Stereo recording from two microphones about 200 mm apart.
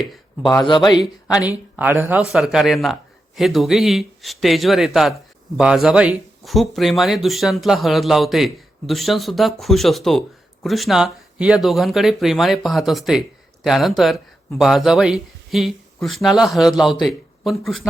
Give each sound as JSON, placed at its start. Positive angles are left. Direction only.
{"t": 0.4, "sound": "a man's voice", "side_deg": 20}
{"t": 1.4, "sound": "a man's voice", "side_deg": -5}